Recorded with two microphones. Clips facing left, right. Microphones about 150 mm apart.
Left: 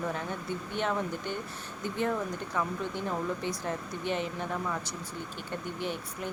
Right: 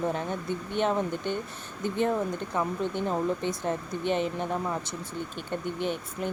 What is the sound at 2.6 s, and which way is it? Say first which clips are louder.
Speech: right 4 dB; 25° right (ahead or behind).